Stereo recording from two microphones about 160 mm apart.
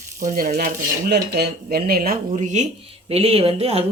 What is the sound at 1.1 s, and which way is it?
Speech, 80° right.